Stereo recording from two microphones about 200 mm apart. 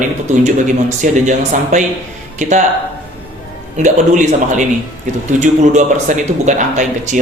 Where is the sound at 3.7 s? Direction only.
40° right (ahead or behind).